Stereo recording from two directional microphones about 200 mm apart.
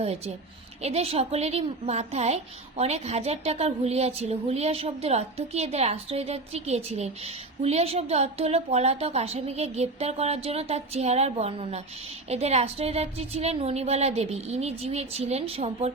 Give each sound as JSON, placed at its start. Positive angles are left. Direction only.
{"t": 0.8, "sound": "a woman's voice", "side_deg": -30}